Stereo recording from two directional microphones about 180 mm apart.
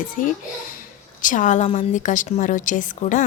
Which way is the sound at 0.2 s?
45° left (ahead or behind).